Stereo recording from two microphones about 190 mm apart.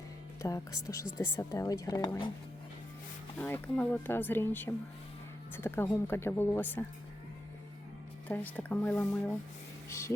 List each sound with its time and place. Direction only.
0.4 s speech: 15° left (ahead or behind)
3.3 s speech: 10° left (ahead or behind)
8.3 s speech: 10° left (ahead or behind)